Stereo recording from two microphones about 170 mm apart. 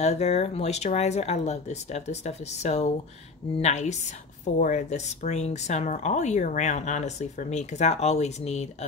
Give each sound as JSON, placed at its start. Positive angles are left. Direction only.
{"t": 0.0, "sound": "speech", "side_deg": 40}